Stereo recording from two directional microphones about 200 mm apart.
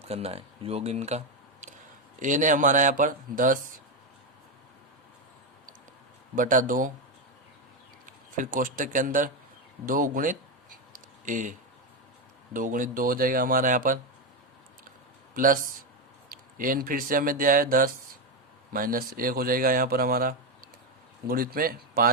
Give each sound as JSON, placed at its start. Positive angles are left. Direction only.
{"t": 0.1, "sound": "speech", "side_deg": -30}
{"t": 6.3, "sound": "speech", "side_deg": -40}
{"t": 8.0, "sound": "speech", "side_deg": -40}
{"t": 10.9, "sound": "a sound", "side_deg": -40}
{"t": 12.5, "sound": "speech", "side_deg": -40}
{"t": 16.3, "sound": "speech", "side_deg": -45}